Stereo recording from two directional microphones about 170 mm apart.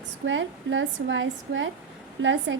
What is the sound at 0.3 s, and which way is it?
A woman's voice, 90° right.